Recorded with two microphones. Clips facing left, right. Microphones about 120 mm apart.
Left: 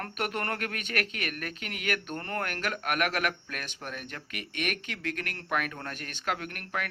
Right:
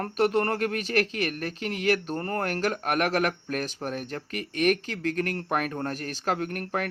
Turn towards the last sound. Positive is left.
turn(degrees=-35)  # may be behind; listen again after turning